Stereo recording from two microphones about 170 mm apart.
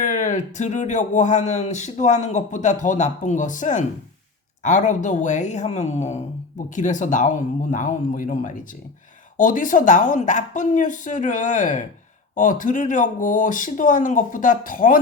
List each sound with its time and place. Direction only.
0.0 s speech: 50° left (ahead or behind)